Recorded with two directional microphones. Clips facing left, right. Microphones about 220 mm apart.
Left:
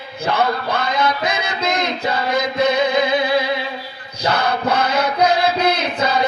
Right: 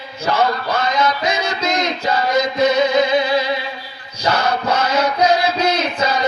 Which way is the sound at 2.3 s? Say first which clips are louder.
Right 2 dB; 55° left (ahead or behind).